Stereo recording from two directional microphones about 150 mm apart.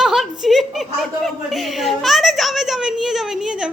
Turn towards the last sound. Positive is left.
turn(degrees=-5)  # may be behind; listen again after turning